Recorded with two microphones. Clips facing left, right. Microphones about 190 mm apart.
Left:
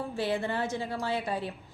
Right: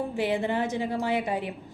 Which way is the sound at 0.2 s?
15° right (ahead or behind).